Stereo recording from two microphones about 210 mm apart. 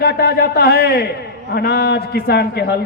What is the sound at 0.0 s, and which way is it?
A man's voice, 50° left (ahead or behind).